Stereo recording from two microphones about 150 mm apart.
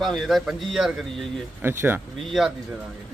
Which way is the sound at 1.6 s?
15° right (ahead or behind).